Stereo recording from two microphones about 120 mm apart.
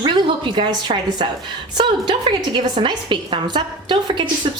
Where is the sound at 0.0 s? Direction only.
45° right (ahead or behind).